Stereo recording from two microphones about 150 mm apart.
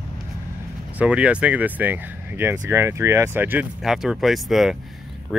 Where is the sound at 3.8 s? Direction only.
5° right (ahead or behind).